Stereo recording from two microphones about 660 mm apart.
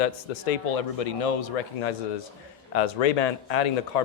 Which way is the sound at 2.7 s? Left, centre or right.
Left.